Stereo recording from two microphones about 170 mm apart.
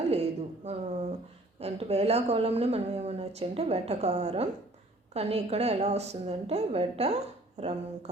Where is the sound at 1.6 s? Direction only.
35° right (ahead or behind).